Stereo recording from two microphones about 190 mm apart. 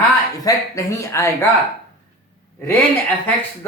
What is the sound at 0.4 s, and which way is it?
Speech, 15° left (ahead or behind).